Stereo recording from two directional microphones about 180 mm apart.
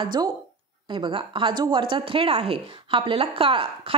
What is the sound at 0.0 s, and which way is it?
Speech, 25° right (ahead or behind).